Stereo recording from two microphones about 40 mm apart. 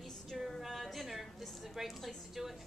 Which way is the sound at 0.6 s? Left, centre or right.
Centre.